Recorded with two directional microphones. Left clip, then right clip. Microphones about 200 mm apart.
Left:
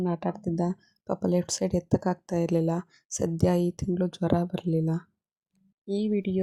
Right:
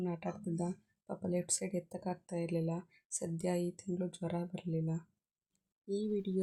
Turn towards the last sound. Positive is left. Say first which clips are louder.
# left 8 dB
turn(degrees=25)  # may be behind; listen again after turning